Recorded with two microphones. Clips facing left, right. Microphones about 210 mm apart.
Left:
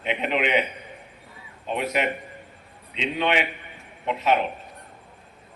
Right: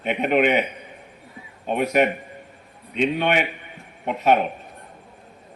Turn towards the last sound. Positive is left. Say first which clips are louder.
# right 3 dB
turn(degrees=-50)  # may be behind; listen again after turning